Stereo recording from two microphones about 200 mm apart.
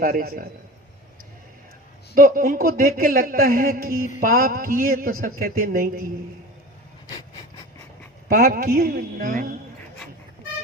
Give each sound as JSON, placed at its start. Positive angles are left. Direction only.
{"t": 0.0, "sound": "a man's voice", "side_deg": -45}
{"t": 2.1, "sound": "a man's voice", "side_deg": -45}
{"t": 8.3, "sound": "a man's voice", "side_deg": -50}